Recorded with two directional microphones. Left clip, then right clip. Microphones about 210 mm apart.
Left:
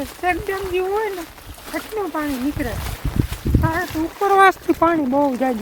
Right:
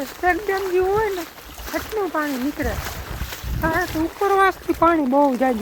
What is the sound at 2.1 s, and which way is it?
Speech, 10° left (ahead or behind).